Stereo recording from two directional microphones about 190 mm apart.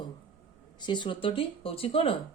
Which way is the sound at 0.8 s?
25° left (ahead or behind).